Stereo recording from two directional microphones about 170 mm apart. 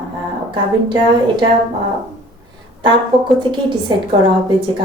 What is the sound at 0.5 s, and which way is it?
Speech, 30° right (ahead or behind).